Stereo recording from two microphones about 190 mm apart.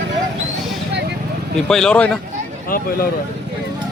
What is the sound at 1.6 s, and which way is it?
Speech, 5° left (ahead or behind).